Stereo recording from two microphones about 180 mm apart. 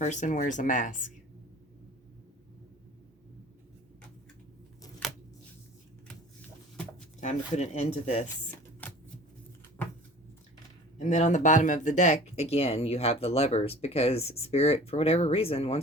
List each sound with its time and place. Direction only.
0.0 s speech: 40° left (ahead or behind)
7.2 s speech: 40° left (ahead or behind)
8.8 s shuffling cards: 10° left (ahead or behind)
9.8 s a sound: 15° left (ahead or behind)
10.9 s speech: 40° left (ahead or behind)